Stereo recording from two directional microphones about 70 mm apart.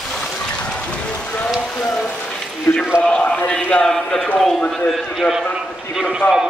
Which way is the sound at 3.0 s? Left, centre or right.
Centre.